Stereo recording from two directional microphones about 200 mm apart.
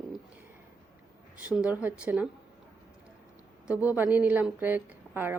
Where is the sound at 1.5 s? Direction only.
10° right (ahead or behind).